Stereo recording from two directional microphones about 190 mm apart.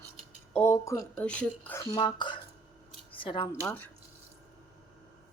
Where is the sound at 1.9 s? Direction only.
25° left (ahead or behind).